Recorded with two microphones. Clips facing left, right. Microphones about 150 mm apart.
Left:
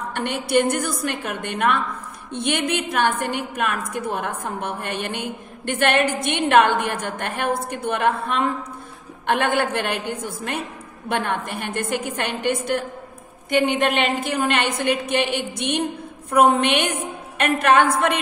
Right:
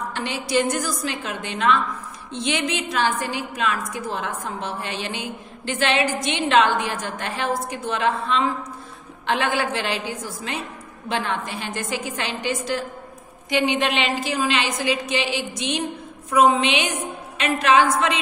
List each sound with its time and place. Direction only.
0.1 s a woman's voice: 60° left (ahead or behind)